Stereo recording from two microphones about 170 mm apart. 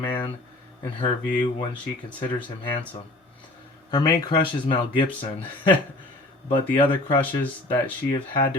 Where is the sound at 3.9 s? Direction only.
25° left (ahead or behind).